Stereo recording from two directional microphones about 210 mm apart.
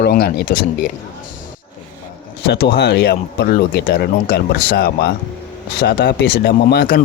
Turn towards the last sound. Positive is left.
turn(degrees=50)  # may be behind; listen again after turning